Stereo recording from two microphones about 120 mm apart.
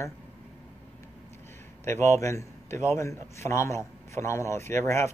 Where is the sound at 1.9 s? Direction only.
20° left (ahead or behind).